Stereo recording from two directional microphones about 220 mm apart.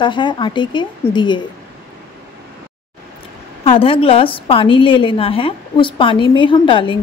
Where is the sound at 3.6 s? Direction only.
25° left (ahead or behind).